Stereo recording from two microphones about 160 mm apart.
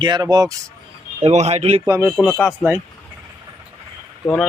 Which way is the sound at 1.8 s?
20° right (ahead or behind).